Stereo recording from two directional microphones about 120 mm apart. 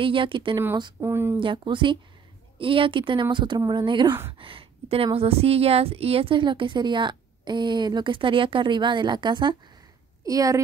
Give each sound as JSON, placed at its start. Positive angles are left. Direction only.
{"t": 0.0, "sound": "a woman's voice", "side_deg": -45}
{"t": 1.0, "sound": "a woman's voice", "side_deg": -20}
{"t": 1.4, "sound": "a woman's voice", "side_deg": -45}
{"t": 10.2, "sound": "a woman's voice", "side_deg": -30}